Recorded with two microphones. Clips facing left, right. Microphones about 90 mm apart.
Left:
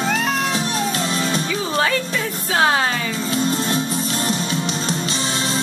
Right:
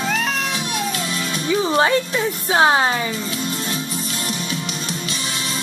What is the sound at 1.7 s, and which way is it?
Music, 25° right (ahead or behind).